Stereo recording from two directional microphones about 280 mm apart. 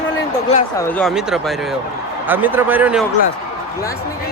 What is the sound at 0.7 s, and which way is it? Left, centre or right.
A man's voice, centre.